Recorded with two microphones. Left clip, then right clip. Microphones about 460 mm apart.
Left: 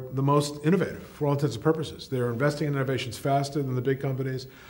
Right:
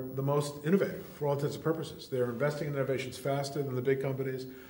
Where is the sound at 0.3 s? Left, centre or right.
Left.